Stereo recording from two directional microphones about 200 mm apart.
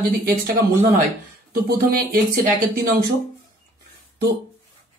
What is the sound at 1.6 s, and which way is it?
Speech, 45° right (ahead or behind).